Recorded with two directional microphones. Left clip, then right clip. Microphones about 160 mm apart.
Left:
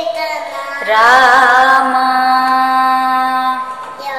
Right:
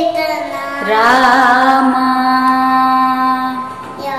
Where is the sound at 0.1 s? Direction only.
10° right (ahead or behind).